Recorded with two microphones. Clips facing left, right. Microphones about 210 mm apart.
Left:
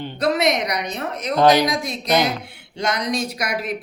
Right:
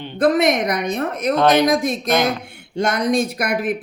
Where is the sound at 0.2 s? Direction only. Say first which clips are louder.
Right 4 dB; 50° right (ahead or behind).